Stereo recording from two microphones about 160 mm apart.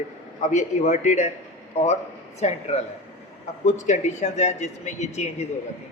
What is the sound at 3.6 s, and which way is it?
A man's voice, 45° left (ahead or behind).